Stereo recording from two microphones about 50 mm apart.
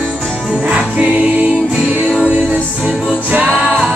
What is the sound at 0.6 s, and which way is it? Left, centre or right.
Music, right.